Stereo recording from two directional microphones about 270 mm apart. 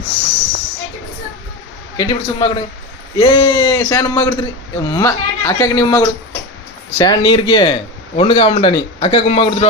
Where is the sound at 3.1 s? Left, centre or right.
Centre.